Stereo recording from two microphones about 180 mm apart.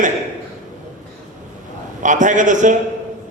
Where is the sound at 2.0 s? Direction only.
45° right (ahead or behind).